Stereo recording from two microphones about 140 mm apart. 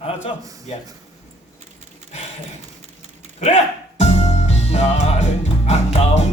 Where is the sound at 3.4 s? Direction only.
55° left (ahead or behind).